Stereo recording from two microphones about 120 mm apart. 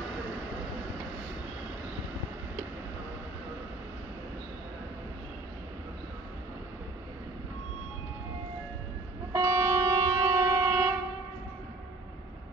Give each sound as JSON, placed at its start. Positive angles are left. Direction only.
{"t": 9.3, "sound": "music", "side_deg": -25}